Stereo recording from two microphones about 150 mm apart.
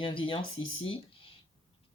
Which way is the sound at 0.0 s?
35° left (ahead or behind).